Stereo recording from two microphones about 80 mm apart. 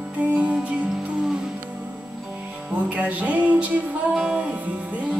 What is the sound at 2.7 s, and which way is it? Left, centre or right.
Music, centre.